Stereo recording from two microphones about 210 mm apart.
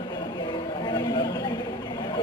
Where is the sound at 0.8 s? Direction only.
20° left (ahead or behind).